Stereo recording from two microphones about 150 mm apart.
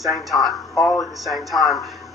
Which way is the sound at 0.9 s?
25° left (ahead or behind).